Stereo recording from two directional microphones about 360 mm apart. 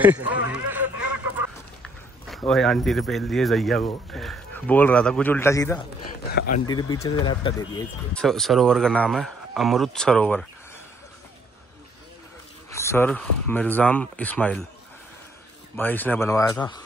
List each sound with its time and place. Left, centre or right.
0.0 s a sound: centre
2.2 s speech: centre
6.3 s a sound: left
6.7 s speech: centre
12.7 s speech: centre
15.7 s speech: centre